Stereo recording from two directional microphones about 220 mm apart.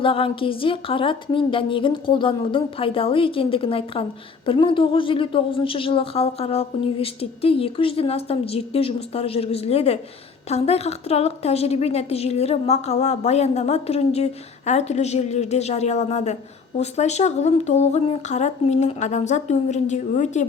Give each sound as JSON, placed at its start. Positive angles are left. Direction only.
{"t": 0.0, "sound": "a woman's voice", "side_deg": 25}